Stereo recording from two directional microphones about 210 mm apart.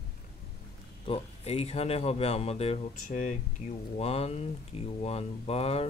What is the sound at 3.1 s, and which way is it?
Speech, 40° left (ahead or behind).